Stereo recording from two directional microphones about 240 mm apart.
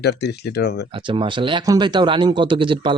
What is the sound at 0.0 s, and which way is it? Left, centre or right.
Speech, left.